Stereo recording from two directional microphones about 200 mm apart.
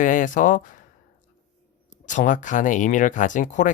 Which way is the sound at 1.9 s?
40° left (ahead or behind).